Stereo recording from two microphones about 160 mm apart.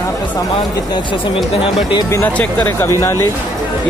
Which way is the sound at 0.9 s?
30° left (ahead or behind).